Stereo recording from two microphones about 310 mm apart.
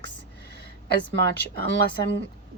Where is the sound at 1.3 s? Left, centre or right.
Left.